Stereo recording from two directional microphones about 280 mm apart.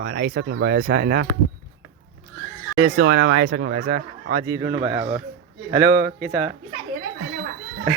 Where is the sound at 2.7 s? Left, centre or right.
Right.